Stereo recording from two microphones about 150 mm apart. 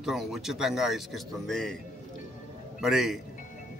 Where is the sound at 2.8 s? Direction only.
5° right (ahead or behind).